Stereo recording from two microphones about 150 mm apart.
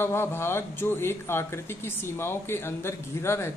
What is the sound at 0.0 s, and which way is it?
Speech, 15° left (ahead or behind).